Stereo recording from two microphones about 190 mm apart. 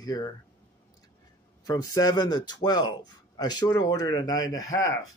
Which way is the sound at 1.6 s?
20° left (ahead or behind).